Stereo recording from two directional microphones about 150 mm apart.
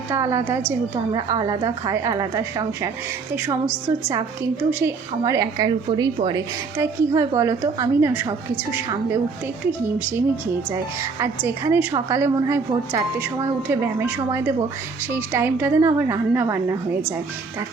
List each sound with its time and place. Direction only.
0.1 s a woman's voice: 20° right (ahead or behind)
0.9 s a woman's voice: 30° right (ahead or behind)
3.3 s a woman's voice: 10° right (ahead or behind)
4.7 s a woman's voice: 15° right (ahead or behind)
10.2 s a woman's voice: 15° right (ahead or behind)